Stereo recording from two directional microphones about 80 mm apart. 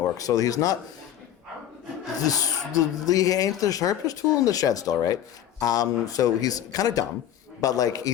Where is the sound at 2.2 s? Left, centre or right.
Left.